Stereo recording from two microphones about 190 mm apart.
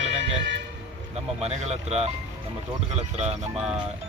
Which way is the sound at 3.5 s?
5° right (ahead or behind).